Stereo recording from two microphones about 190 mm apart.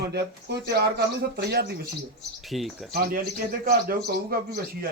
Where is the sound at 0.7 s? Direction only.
60° right (ahead or behind).